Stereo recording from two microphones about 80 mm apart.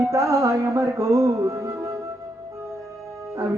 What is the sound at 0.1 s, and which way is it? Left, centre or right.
Speech, right.